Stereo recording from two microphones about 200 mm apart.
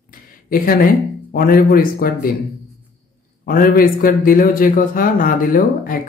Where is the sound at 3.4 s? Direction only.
45° left (ahead or behind).